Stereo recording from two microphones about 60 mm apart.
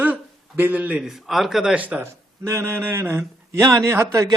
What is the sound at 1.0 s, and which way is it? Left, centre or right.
Speech, centre.